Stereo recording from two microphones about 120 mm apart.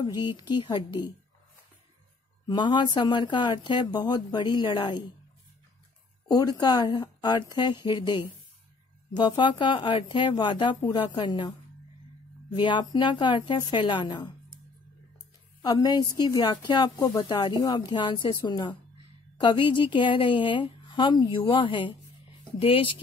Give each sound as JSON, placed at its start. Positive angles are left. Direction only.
{"t": 0.0, "sound": "speech", "side_deg": 40}
{"t": 2.4, "sound": "speech", "side_deg": 40}
{"t": 6.2, "sound": "speech", "side_deg": 35}
{"t": 15.6, "sound": "a woman's voice", "side_deg": 35}